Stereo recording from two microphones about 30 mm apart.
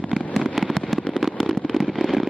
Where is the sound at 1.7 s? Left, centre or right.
Centre.